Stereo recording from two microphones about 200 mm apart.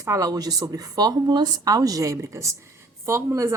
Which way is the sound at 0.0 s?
15° right (ahead or behind).